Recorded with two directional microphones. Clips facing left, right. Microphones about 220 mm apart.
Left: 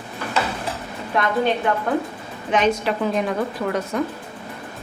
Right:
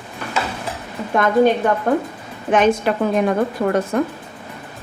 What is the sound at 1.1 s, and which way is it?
Speech, 50° right (ahead or behind).